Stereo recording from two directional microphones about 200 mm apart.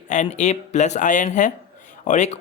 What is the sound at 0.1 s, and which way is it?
A man's voice, 35° left (ahead or behind).